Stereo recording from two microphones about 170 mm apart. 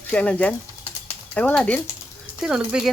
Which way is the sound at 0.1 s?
5° left (ahead or behind).